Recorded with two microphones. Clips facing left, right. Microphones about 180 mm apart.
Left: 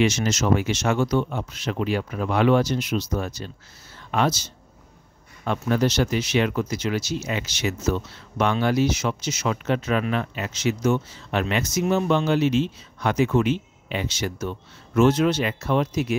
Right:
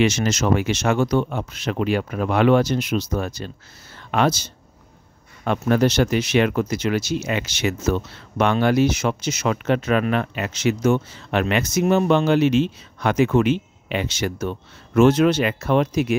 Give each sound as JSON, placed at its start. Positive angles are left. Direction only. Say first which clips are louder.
{"t": 0.0, "sound": "speech", "louder": "right 2 dB", "side_deg": -65}